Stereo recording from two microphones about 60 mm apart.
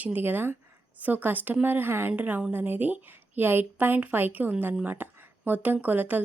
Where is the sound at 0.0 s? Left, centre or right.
Right.